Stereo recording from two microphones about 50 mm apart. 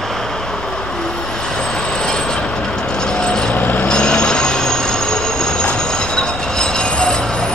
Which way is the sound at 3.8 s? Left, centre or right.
Centre.